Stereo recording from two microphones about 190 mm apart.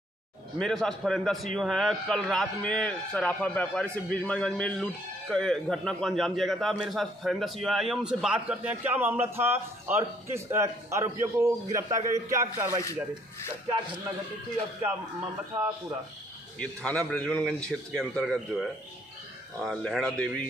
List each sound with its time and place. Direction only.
0.6 s a man's voice: 5° left (ahead or behind); by 12.8 s 15° right (ahead or behind)
16.5 s a man's voice: 5° left (ahead or behind)